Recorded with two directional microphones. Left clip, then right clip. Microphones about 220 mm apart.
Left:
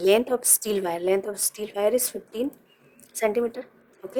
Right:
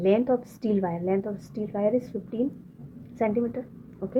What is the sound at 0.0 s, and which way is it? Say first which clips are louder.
Speech: left 2 dB; 35° left (ahead or behind).